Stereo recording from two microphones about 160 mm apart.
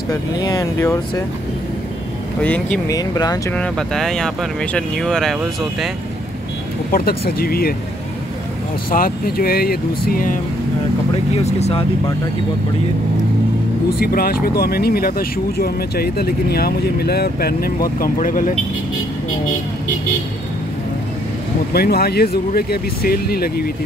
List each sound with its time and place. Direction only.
0.1 s speech: 25° left (ahead or behind)
2.4 s speech: 10° left (ahead or behind)
2.9 s speech: 25° left (ahead or behind)
3.5 s speech: 5° left (ahead or behind)
6.9 s speech: 70° left (ahead or behind)
8.9 s speech: 65° left (ahead or behind)
11.3 s speech: 40° left (ahead or behind)
13.9 s speech: 70° left (ahead or behind)
21.7 s speech: 75° left (ahead or behind)